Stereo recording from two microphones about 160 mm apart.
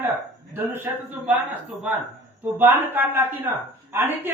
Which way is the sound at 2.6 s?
10° right (ahead or behind).